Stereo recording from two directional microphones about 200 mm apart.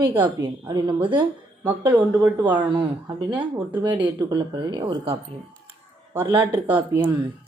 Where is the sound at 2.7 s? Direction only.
25° right (ahead or behind).